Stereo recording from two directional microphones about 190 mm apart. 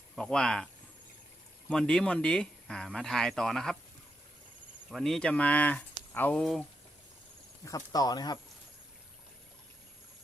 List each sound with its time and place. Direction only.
0.2 s speech: 5° left (ahead or behind)
1.7 s speech: 5° left (ahead or behind)
4.9 s speech: centre (ahead or behind)
7.6 s speech: 20° left (ahead or behind)